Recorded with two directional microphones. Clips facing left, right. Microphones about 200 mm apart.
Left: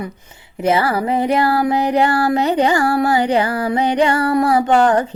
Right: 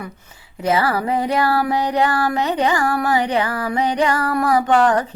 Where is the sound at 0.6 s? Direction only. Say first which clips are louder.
Left 2 dB; 25° left (ahead or behind).